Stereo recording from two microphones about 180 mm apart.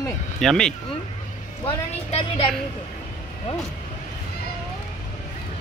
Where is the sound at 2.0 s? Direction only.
35° left (ahead or behind).